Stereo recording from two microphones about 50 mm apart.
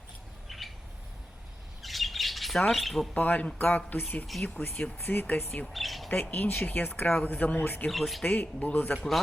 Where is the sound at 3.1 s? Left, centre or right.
Left.